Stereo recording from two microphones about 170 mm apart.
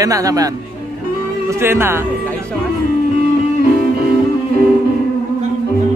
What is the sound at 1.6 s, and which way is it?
Speech, 15° right (ahead or behind).